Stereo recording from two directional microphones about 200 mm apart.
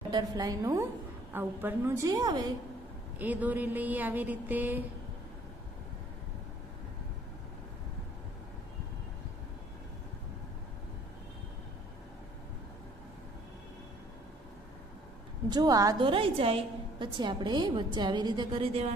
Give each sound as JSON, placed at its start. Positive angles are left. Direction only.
{"t": 0.1, "sound": "speech", "side_deg": -20}
{"t": 3.2, "sound": "speech", "side_deg": -10}
{"t": 15.5, "sound": "a woman's voice", "side_deg": -20}